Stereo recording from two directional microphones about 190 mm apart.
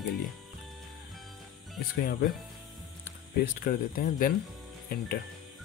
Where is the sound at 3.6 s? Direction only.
50° left (ahead or behind).